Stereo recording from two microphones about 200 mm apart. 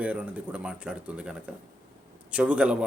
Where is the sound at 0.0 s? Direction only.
5° right (ahead or behind).